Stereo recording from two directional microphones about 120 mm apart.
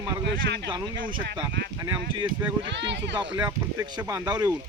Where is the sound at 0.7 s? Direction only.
35° right (ahead or behind).